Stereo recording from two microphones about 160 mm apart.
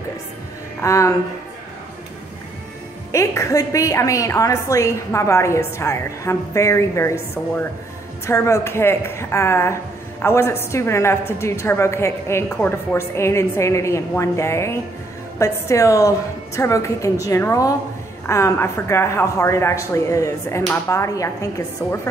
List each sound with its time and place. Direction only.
0.8 s a woman's voice: 20° left (ahead or behind)
3.1 s a woman's voice: 20° left (ahead or behind)